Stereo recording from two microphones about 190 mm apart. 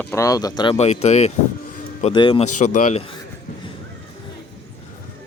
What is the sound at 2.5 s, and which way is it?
Speech, 40° left (ahead or behind).